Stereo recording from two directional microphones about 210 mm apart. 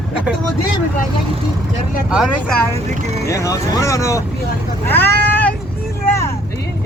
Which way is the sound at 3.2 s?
15° left (ahead or behind).